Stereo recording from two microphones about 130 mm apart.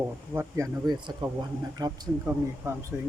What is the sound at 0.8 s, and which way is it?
Speech, 30° right (ahead or behind).